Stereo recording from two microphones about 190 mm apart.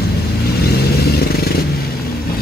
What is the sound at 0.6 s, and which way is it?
Motorcycle, 55° left (ahead or behind).